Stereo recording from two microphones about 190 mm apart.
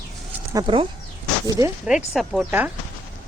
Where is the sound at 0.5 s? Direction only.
25° right (ahead or behind).